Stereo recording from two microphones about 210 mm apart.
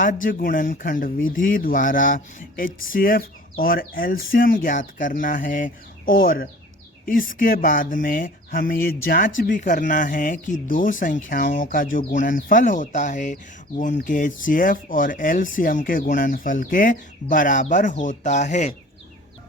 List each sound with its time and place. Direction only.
0.0 s speech: 40° left (ahead or behind)